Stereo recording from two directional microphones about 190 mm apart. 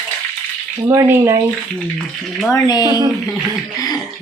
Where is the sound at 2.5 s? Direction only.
20° left (ahead or behind).